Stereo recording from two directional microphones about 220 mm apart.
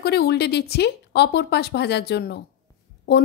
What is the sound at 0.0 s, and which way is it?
A woman's voice, 50° left (ahead or behind).